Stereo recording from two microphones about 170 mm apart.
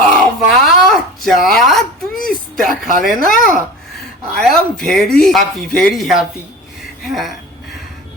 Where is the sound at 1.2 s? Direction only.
Centre (ahead or behind).